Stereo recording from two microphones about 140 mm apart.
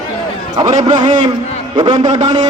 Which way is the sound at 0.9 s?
30° right (ahead or behind).